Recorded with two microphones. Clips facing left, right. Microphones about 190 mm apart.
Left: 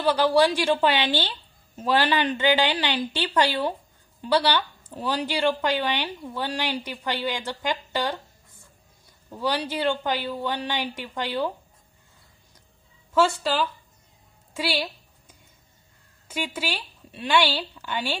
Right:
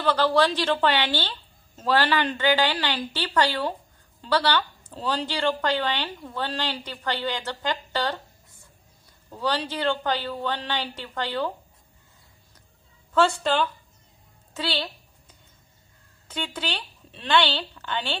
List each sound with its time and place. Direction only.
0.0 s speech: 10° left (ahead or behind)
9.3 s speech: 15° left (ahead or behind)
13.4 s speech: 5° left (ahead or behind)
14.5 s a sound: 10° left (ahead or behind)
16.3 s speech: 10° left (ahead or behind)